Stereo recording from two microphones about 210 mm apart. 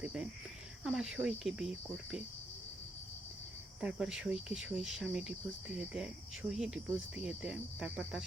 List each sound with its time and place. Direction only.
0.0 s speech: 5° right (ahead or behind)
3.8 s speech: 5° right (ahead or behind)